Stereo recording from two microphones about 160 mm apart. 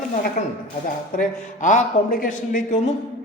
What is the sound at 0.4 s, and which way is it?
Speech, 45° left (ahead or behind).